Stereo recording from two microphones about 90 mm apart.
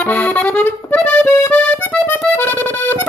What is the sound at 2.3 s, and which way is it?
Music, 20° left (ahead or behind).